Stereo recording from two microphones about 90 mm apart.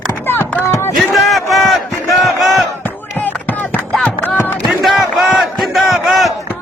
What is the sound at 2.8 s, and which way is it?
Music, 20° left (ahead or behind).